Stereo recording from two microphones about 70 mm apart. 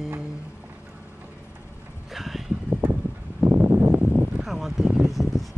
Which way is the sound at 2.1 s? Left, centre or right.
Centre.